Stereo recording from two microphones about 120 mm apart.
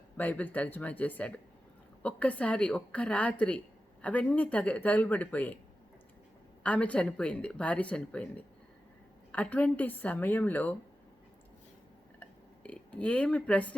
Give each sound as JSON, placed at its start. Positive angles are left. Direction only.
{"t": 0.2, "sound": "speech", "side_deg": 15}
{"t": 6.6, "sound": "speech", "side_deg": 10}
{"t": 12.2, "sound": "a sound", "side_deg": 10}